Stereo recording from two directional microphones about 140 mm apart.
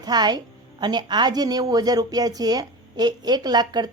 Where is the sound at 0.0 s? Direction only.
30° right (ahead or behind).